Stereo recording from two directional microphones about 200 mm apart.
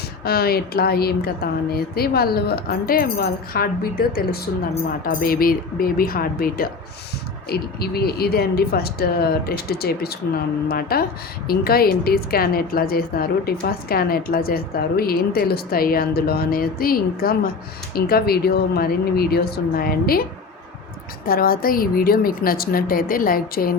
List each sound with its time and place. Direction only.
0.3 s a woman's voice: 50° left (ahead or behind)
21.2 s a woman's voice: 45° left (ahead or behind)